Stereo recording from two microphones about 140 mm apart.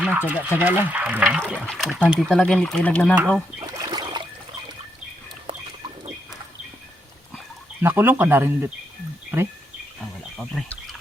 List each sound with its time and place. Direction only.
0.0 s speech: 10° right (ahead or behind)
1.6 s speech: 5° left (ahead or behind)
3.2 s speech: 15° right (ahead or behind)
3.8 s boat: 30° right (ahead or behind)
5.5 s bird: 40° right (ahead or behind)
7.8 s speech: 15° right (ahead or behind)